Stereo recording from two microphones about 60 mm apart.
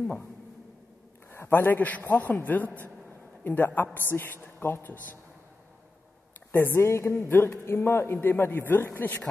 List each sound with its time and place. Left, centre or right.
1.3 s a man's voice: left
3.1 s a sound: left
4.2 s a man's voice: left
6.5 s a woman's voice: left